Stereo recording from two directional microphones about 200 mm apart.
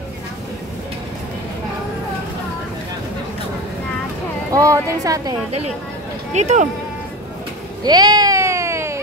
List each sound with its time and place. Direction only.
4.6 s speech: 15° right (ahead or behind)
6.3 s speech: 35° right (ahead or behind)
7.8 s a sound: 20° right (ahead or behind)